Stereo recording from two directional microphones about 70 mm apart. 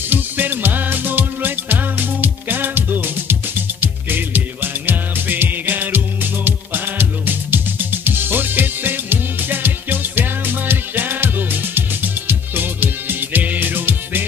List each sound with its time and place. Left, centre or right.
0.1 s music: right